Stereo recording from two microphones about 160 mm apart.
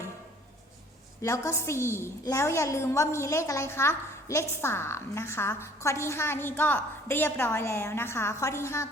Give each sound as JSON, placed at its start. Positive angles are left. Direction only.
{"t": 1.2, "sound": "a woman's voice", "side_deg": 15}